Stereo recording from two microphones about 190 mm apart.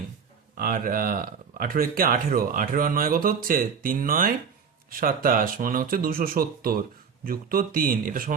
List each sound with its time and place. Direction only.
0.5 s speech: 50° right (ahead or behind)